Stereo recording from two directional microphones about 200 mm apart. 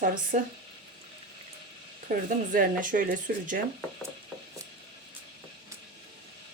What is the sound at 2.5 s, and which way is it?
Speech, 40° right (ahead or behind).